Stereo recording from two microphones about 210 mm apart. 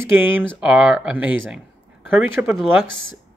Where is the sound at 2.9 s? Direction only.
70° right (ahead or behind).